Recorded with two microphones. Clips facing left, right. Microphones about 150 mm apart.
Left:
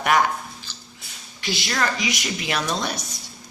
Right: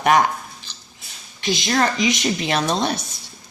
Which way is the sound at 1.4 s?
20° right (ahead or behind).